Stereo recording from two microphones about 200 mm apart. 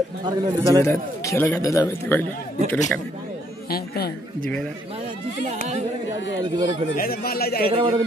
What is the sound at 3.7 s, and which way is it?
Chatter, 50° left (ahead or behind).